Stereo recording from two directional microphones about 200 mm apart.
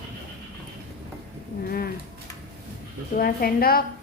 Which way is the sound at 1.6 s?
50° left (ahead or behind).